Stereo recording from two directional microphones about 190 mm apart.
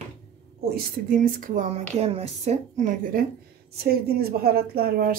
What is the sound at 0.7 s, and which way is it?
Speech, 45° right (ahead or behind).